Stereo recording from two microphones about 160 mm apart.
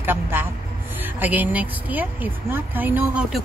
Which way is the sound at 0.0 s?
15° right (ahead or behind).